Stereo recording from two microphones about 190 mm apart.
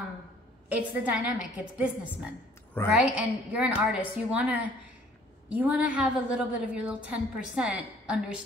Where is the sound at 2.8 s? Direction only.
10° left (ahead or behind).